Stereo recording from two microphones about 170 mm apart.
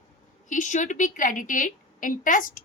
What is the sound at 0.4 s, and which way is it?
A woman's voice, 50° left (ahead or behind).